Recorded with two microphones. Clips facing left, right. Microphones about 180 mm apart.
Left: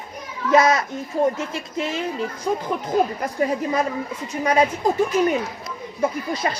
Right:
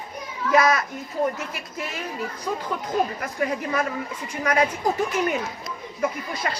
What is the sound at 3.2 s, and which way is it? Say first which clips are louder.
Speech: left 4 dB; 25° left (ahead or behind).